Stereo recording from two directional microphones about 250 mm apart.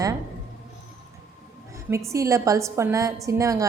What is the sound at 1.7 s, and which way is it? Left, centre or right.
A woman's voice, centre.